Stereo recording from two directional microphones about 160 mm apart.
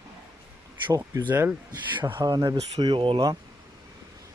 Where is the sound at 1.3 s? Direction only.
10° right (ahead or behind); by 3.2 s 35° right (ahead or behind).